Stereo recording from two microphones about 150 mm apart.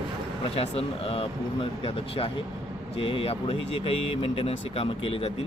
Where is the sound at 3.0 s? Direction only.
35° left (ahead or behind).